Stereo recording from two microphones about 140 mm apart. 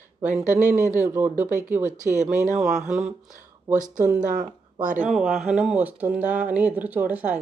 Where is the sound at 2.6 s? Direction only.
5° right (ahead or behind).